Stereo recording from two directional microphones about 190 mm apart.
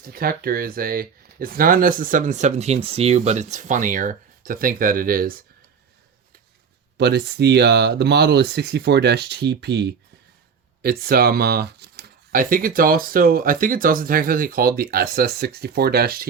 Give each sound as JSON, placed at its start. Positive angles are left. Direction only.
{"t": 0.0, "sound": "speech", "side_deg": -50}
{"t": 6.9, "sound": "speech", "side_deg": -60}